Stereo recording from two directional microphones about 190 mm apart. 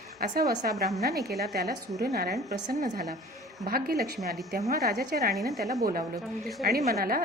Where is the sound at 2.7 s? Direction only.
45° right (ahead or behind).